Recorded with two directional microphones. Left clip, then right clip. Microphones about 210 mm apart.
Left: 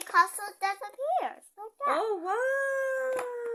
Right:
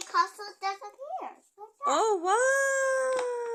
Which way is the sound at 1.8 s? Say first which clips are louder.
Right 3 dB; 30° right (ahead or behind).